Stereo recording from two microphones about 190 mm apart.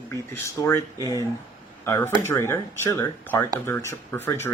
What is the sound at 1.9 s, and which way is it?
Speech, 15° left (ahead or behind).